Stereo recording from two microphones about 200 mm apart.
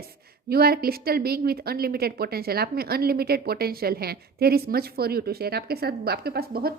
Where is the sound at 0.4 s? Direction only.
50° right (ahead or behind).